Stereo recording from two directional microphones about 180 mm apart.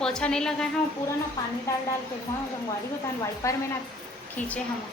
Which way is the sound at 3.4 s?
15° left (ahead or behind).